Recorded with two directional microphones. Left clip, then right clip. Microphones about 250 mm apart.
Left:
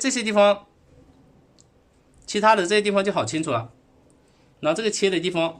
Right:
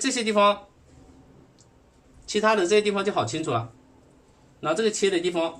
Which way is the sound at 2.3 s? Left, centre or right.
Left.